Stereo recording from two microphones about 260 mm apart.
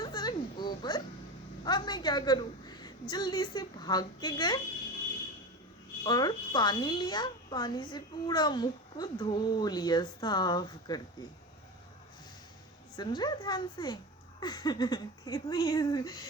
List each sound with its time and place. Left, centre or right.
0.0 s a sound: centre
1.6 s a woman's voice: centre
6.0 s a woman's voice: centre
13.0 s a woman's voice: centre